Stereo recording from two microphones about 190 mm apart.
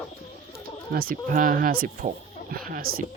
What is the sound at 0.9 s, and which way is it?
Speech, 50° right (ahead or behind).